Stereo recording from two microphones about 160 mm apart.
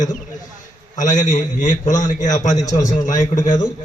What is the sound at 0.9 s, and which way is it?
A man's voice, 50° left (ahead or behind).